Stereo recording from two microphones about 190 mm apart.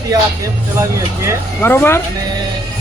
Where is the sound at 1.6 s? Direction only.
10° left (ahead or behind).